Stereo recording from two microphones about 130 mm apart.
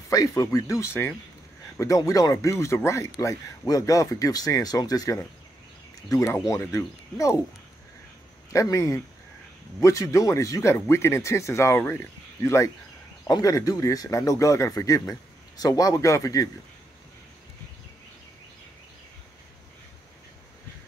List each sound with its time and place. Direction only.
0.1 s speech: 30° left (ahead or behind)
8.5 s speech: 25° left (ahead or behind)